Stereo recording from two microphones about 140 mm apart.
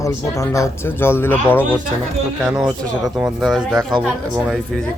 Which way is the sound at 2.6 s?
5° right (ahead or behind).